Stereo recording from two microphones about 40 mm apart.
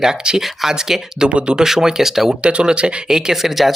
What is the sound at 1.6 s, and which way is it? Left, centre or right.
Speech, centre.